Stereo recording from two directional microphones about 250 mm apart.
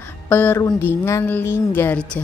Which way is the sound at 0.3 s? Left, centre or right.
Centre.